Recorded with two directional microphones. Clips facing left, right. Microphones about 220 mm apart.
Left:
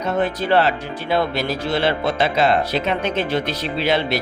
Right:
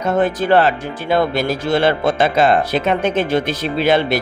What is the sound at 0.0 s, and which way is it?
Speech, 50° right (ahead or behind).